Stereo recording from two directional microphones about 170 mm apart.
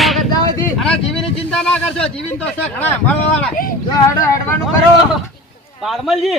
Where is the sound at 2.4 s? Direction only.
10° left (ahead or behind).